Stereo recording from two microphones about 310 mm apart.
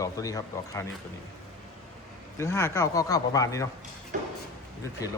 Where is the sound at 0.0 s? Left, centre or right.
Centre.